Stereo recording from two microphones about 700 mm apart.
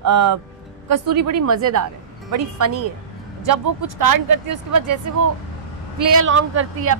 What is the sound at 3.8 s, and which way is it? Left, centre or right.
Speech, right.